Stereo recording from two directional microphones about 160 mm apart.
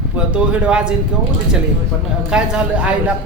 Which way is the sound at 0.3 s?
10° right (ahead or behind).